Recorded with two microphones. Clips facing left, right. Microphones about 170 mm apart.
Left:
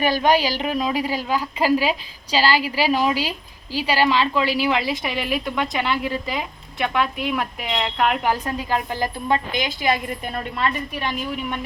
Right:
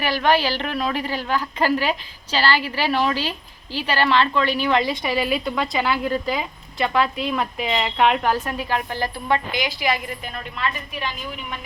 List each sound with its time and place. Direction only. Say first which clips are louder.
0.2 s a woman's voice: left 1 dB; 15° left (ahead or behind)
8.3 s a woman's voice: even; 15° left (ahead or behind)